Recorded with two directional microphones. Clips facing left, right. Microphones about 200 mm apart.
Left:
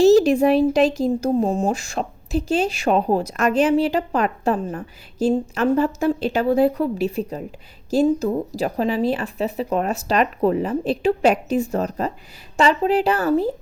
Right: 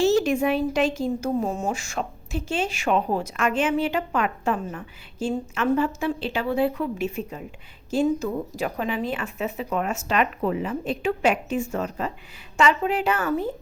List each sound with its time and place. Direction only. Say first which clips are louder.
0.0 s speech: left 7 dB; 35° left (ahead or behind)